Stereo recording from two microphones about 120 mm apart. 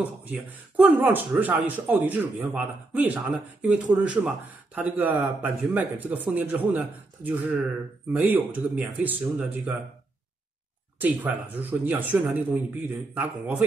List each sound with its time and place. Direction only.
0.0 s speech: 15° right (ahead or behind)
11.0 s speech: 15° right (ahead or behind)